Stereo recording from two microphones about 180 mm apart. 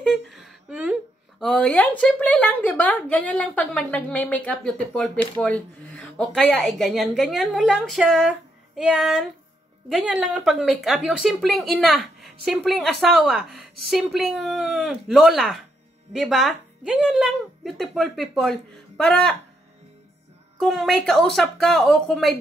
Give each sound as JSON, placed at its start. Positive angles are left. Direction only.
{"t": 0.0, "sound": "a sound", "side_deg": 0}
{"t": 1.4, "sound": "a woman's voice", "side_deg": 5}
{"t": 20.5, "sound": "a woman's voice", "side_deg": 0}